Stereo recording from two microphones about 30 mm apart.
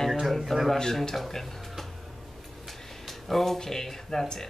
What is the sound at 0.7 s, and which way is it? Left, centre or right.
Speech, centre.